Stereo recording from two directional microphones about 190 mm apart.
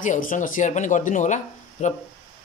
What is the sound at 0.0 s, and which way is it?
Speech, 45° left (ahead or behind).